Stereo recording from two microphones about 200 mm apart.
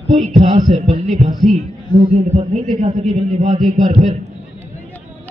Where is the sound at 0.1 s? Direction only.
35° right (ahead or behind).